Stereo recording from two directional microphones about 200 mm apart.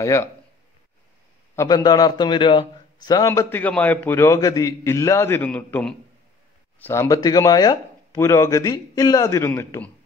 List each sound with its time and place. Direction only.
0.0 s speech: 15° left (ahead or behind)
1.5 s a man's voice: 15° left (ahead or behind)